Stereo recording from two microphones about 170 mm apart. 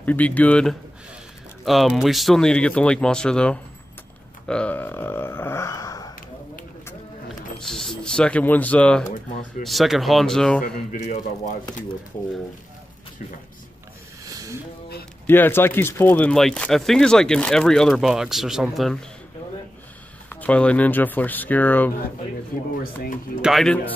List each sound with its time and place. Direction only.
0.0 s speech: 10° left (ahead or behind)
7.6 s speech: 5° left (ahead or behind)
14.2 s a sound: 20° right (ahead or behind)
15.2 s speech: 10° left (ahead or behind)
20.2 s speech: 10° left (ahead or behind)
23.4 s speech: centre (ahead or behind)